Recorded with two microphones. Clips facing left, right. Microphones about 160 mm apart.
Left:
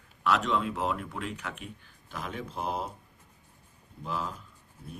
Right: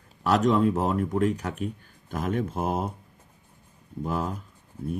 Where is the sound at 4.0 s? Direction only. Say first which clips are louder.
Right 6 dB; 50° right (ahead or behind).